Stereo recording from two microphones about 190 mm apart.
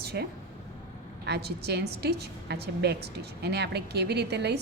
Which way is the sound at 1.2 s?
60° right (ahead or behind).